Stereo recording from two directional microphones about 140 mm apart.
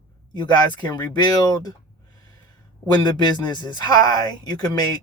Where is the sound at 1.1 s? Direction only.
30° left (ahead or behind).